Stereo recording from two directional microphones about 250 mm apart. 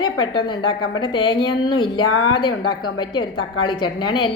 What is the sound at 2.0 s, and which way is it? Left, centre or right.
Speech, left.